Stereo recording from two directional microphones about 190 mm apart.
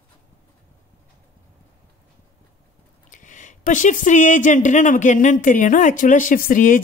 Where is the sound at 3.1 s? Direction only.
40° left (ahead or behind).